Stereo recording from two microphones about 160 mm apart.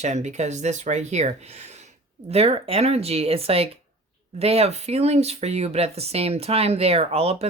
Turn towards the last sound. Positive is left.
turn(degrees=-40)  # may be behind; listen again after turning